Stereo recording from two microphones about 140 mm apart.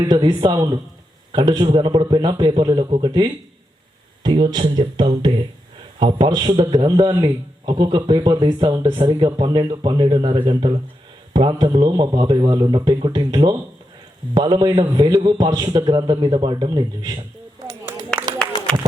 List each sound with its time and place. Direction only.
0.0 s a man's voice: 35° right (ahead or behind)